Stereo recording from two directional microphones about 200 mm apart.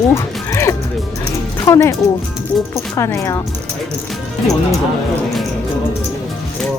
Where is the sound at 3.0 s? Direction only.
15° left (ahead or behind).